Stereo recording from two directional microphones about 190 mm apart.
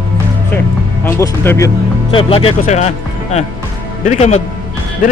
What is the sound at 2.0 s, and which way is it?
Speech, 30° left (ahead or behind).